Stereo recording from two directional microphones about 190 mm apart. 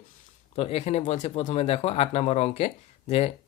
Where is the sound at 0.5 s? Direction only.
30° left (ahead or behind).